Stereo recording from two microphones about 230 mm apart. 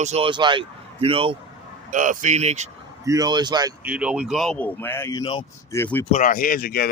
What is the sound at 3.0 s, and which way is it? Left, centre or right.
Speech, centre.